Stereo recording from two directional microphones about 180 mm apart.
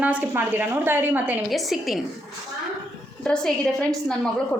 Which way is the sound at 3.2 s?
5° left (ahead or behind).